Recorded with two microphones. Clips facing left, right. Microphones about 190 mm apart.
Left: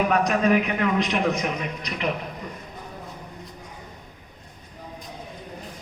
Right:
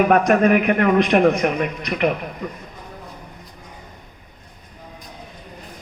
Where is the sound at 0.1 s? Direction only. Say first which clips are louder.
Right 5 dB; 55° right (ahead or behind).